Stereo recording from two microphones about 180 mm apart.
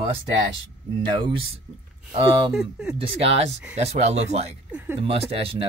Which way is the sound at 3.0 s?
35° right (ahead or behind).